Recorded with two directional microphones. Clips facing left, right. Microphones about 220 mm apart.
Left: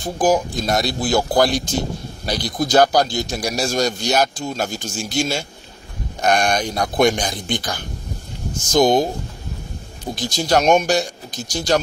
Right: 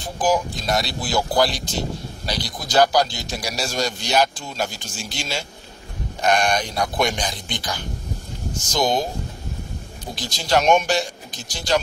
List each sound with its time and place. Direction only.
0.0 s speech: 45° left (ahead or behind)
10.1 s speech: 50° left (ahead or behind)